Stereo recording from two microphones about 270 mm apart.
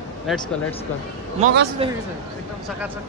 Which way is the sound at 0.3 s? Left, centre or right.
Centre.